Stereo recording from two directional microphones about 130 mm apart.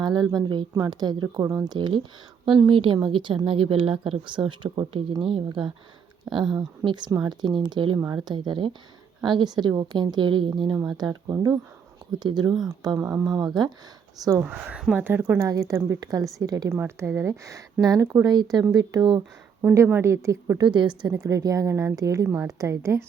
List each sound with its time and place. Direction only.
0.0 s a woman's voice: 35° right (ahead or behind)
2.5 s a woman's voice: 40° right (ahead or behind)
12.5 s speech: centre (ahead or behind)
13.0 s a woman's voice: 20° right (ahead or behind)
14.4 s a woman's voice: 5° right (ahead or behind); by 19.2 s 30° right (ahead or behind)
19.6 s a woman's voice: 20° right (ahead or behind)
20.6 s a woman's voice: 35° right (ahead or behind)
21.1 s a woman's voice: 25° right (ahead or behind)